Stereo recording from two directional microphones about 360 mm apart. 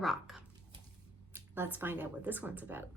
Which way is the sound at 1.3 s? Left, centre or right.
Centre.